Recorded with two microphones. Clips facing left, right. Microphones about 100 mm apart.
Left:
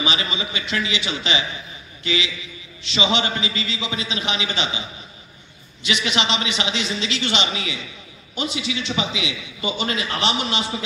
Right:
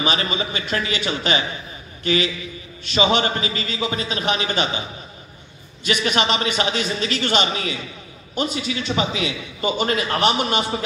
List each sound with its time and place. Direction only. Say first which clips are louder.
0.0 s a man's voice: right 2 dB; 45° right (ahead or behind)
5.9 s a man's voice: right 2 dB; 45° right (ahead or behind)